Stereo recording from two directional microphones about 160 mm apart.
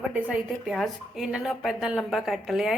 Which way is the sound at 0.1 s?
5° right (ahead or behind).